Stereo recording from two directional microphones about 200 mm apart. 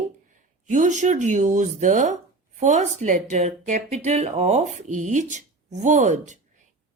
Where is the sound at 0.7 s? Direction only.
35° right (ahead or behind).